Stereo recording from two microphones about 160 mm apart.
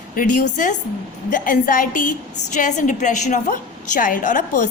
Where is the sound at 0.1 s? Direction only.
55° left (ahead or behind).